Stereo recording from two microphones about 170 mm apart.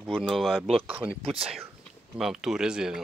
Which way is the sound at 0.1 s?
Centre (ahead or behind).